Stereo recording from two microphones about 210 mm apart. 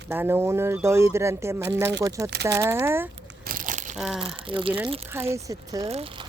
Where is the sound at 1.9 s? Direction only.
55° right (ahead or behind).